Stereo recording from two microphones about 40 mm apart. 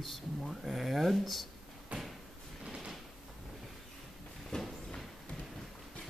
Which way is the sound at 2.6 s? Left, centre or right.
Right.